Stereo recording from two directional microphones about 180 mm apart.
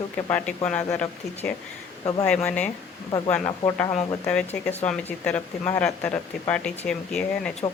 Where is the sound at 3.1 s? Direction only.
25° left (ahead or behind).